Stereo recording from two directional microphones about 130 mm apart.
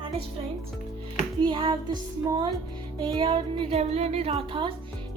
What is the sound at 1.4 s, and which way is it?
Speech, 40° right (ahead or behind).